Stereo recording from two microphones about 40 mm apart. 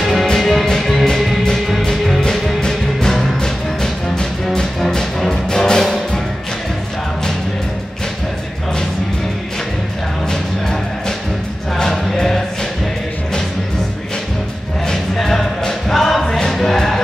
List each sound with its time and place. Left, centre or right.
0.0 s music: centre
5.3 s music: centre
11.7 s music: centre
15.2 s music: centre
16.3 s music: centre